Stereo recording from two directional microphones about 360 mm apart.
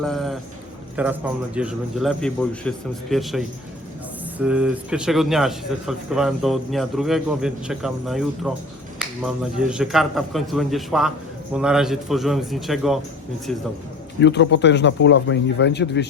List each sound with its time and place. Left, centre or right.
0.0 s speech: centre
14.2 s a man's voice: left